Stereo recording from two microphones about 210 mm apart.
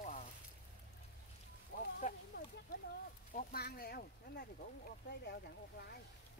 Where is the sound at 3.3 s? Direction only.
45° left (ahead or behind).